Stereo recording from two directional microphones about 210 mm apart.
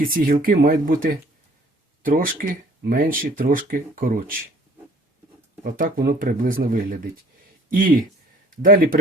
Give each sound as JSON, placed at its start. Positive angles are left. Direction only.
{"t": 0.0, "sound": "speech", "side_deg": -40}
{"t": 5.6, "sound": "speech", "side_deg": -40}